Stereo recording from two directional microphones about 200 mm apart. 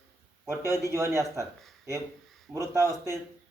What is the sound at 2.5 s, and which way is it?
Speech, 15° right (ahead or behind).